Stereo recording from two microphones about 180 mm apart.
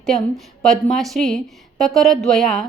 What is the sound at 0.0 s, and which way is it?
A woman's voice, centre (ahead or behind).